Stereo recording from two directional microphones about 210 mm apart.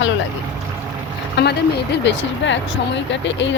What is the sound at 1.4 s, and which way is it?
A woman's voice, 55° left (ahead or behind).